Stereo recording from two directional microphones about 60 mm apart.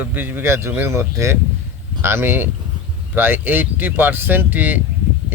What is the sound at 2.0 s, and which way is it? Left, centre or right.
A man's voice, right.